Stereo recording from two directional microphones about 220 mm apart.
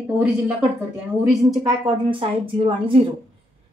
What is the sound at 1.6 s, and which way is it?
A woman's voice, 20° right (ahead or behind).